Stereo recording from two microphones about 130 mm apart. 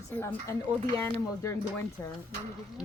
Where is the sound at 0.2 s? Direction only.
20° left (ahead or behind).